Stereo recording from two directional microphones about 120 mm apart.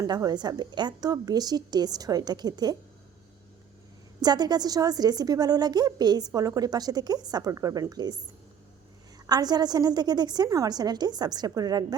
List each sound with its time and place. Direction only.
0.0 s a woman's voice: 30° right (ahead or behind)
4.2 s a woman's voice: 35° right (ahead or behind)
9.1 s a woman's voice: 35° right (ahead or behind)